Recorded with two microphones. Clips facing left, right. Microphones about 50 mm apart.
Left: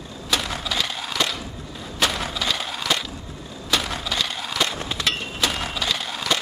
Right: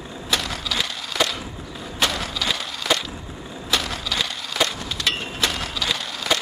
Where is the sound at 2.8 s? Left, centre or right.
Centre.